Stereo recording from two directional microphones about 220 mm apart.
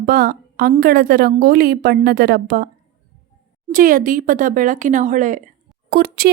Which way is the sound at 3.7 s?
40° right (ahead or behind).